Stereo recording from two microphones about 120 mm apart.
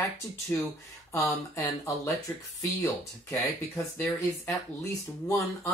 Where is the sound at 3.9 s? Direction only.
20° left (ahead or behind).